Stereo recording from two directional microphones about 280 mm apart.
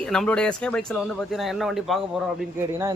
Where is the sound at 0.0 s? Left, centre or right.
Centre.